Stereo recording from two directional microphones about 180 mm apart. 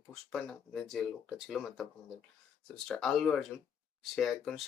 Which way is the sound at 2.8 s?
5° left (ahead or behind).